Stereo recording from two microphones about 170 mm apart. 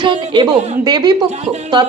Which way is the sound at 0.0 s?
30° right (ahead or behind).